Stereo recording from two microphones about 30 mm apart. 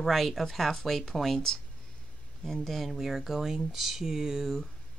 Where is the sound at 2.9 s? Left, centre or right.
Centre.